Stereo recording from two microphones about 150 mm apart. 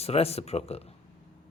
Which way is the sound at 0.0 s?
40° left (ahead or behind).